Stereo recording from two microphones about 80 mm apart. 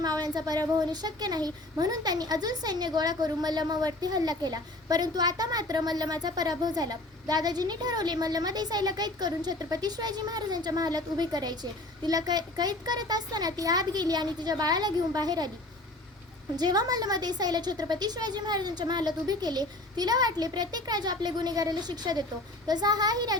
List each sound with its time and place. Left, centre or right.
0.0 s a sound: right
0.8 s a woman's voice: right
16.6 s a woman's voice: right